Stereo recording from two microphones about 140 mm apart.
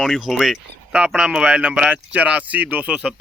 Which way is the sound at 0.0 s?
Centre (ahead or behind).